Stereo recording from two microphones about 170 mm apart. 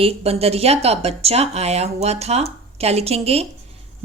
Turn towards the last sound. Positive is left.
turn(degrees=-35)  # may be behind; listen again after turning